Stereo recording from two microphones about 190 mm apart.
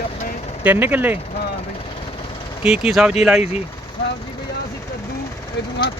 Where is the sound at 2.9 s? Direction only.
Centre (ahead or behind).